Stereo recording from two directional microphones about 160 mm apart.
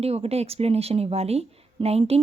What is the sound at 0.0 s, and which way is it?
Speech, 40° right (ahead or behind).